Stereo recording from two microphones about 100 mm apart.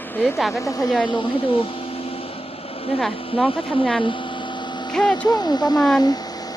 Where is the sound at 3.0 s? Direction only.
5° left (ahead or behind).